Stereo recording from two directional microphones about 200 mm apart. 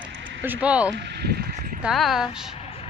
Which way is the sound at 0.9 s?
55° right (ahead or behind).